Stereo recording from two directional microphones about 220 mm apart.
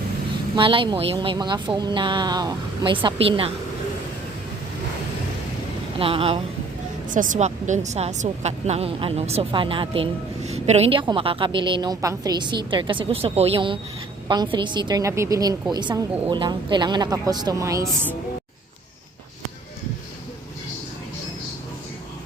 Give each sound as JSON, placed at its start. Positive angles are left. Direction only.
{"t": 0.5, "sound": "a woman's voice", "side_deg": -20}
{"t": 6.0, "sound": "a woman's voice", "side_deg": -25}
{"t": 7.1, "sound": "a woman's voice", "side_deg": -35}